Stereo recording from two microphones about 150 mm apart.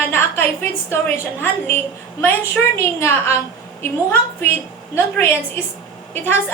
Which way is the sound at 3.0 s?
15° left (ahead or behind).